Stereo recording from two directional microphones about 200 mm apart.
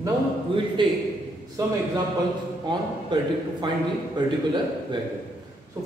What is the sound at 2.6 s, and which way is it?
A man's voice, 20° right (ahead or behind).